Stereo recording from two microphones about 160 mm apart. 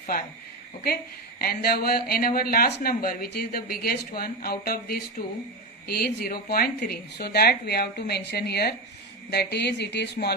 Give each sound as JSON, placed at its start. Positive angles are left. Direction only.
{"t": 1.4, "sound": "speech", "side_deg": 75}